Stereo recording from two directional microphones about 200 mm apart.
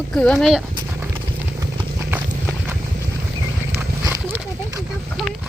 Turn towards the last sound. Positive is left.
turn(degrees=-15)  # may be behind; listen again after turning